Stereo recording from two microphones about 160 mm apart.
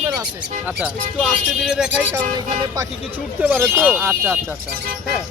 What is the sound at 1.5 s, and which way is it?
Speech, 5° right (ahead or behind).